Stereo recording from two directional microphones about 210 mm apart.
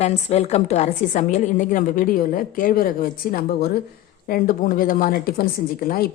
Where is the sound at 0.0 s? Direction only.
30° left (ahead or behind).